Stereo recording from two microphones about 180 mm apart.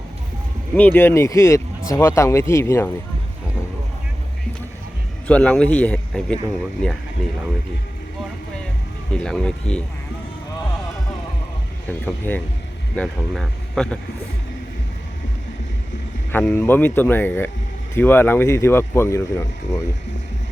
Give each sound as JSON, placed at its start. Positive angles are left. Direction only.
{"t": 0.8, "sound": "speech", "side_deg": 10}
{"t": 5.3, "sound": "speech", "side_deg": 5}
{"t": 9.1, "sound": "speech", "side_deg": 5}
{"t": 11.9, "sound": "speech", "side_deg": 10}
{"t": 16.3, "sound": "speech", "side_deg": 10}